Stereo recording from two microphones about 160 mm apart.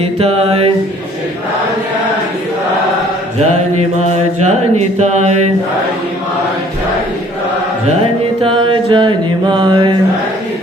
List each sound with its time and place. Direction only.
0.2 s music: 40° right (ahead or behind)
4.4 s a sound: 45° right (ahead or behind)
8.4 s music: 35° right (ahead or behind)
9.6 s mantra: 30° right (ahead or behind)